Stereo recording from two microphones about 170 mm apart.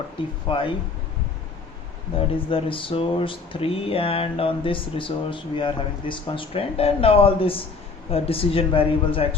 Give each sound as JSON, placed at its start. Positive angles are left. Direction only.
{"t": 0.2, "sound": "speech", "side_deg": 30}
{"t": 2.1, "sound": "speech", "side_deg": 30}